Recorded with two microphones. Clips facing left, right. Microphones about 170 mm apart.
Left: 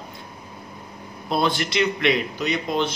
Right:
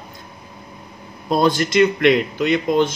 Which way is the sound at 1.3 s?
45° right (ahead or behind).